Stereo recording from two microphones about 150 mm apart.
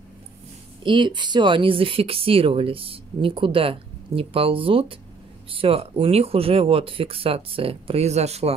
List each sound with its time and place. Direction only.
0.8 s speech: 30° right (ahead or behind)